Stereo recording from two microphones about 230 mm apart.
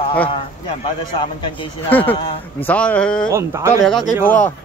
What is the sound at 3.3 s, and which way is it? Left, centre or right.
Speech, centre.